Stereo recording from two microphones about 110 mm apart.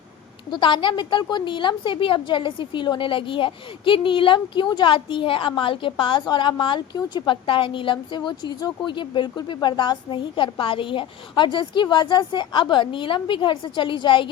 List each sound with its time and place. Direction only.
0.5 s a woman's voice: 45° left (ahead or behind)